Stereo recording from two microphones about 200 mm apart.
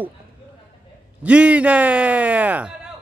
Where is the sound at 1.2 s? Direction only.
5° right (ahead or behind).